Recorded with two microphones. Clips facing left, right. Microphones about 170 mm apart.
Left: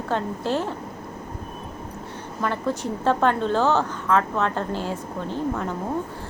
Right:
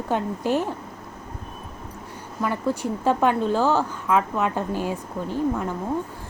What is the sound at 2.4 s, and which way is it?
A woman's voice, 10° right (ahead or behind).